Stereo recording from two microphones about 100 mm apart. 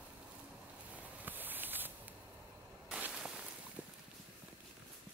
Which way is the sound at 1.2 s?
20° right (ahead or behind).